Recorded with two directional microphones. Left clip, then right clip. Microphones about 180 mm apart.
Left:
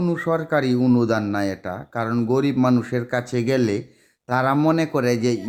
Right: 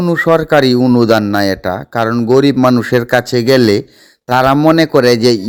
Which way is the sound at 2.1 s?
35° right (ahead or behind).